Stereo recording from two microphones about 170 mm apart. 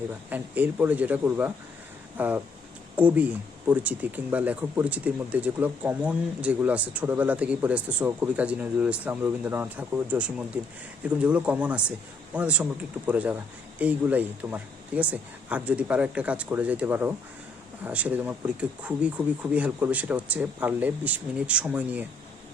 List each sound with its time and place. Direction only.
0.1 s speech: 10° right (ahead or behind)